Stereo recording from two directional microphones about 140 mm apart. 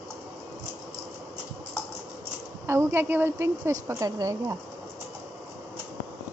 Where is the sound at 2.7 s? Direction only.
15° right (ahead or behind).